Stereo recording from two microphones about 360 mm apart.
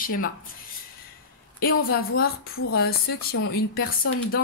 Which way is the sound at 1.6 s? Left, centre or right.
Left.